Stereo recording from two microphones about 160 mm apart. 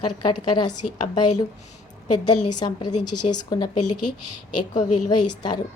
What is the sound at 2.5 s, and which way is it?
A woman's voice, 25° left (ahead or behind).